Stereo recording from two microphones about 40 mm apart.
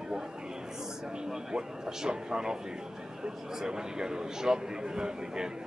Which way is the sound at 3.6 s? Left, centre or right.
Centre.